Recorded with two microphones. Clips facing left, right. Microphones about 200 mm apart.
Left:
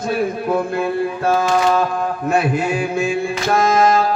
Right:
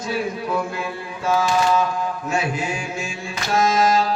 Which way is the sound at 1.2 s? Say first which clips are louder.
Left 2 dB; 60° left (ahead or behind).